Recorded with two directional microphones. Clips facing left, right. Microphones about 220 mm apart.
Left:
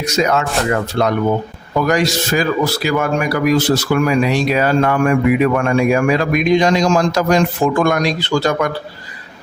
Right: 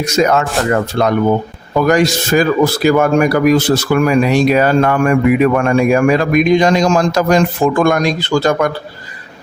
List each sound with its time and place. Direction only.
0.2 s a man's voice: 50° right (ahead or behind)